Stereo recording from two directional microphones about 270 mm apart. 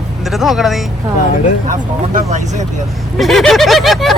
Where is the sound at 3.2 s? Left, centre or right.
Centre.